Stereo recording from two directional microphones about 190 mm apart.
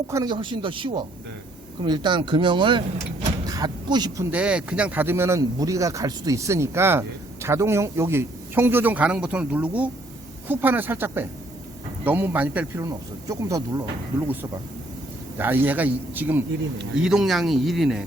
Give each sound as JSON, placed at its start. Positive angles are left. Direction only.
{"t": 0.1, "sound": "speech", "side_deg": -20}
{"t": 4.3, "sound": "speech", "side_deg": -5}